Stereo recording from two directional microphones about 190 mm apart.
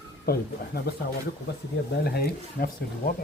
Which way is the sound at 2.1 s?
55° left (ahead or behind).